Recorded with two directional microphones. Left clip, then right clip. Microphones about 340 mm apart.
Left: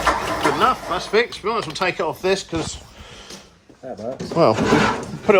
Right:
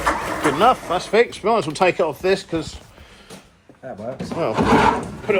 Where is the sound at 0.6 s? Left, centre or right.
Centre.